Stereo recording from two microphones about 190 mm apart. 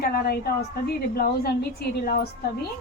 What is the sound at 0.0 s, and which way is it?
A woman's voice, 55° left (ahead or behind).